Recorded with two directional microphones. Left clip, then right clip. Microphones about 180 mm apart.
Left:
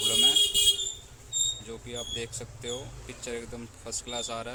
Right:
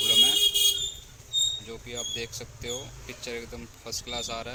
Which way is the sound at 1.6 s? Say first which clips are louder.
Right 2 dB; centre (ahead or behind).